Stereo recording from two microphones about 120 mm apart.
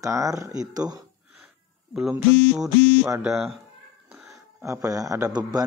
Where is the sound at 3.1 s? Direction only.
5° right (ahead or behind).